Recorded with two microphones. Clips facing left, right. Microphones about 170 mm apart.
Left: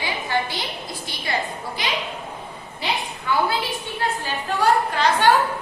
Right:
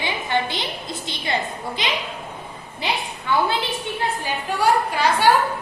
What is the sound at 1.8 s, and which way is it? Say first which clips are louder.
Speech: right 1 dB; 20° right (ahead or behind).